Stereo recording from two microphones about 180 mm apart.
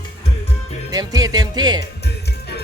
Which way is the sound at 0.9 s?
20° right (ahead or behind).